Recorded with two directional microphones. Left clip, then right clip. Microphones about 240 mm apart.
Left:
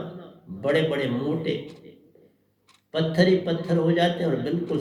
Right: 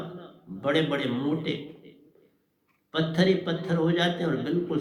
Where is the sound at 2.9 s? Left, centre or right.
Right.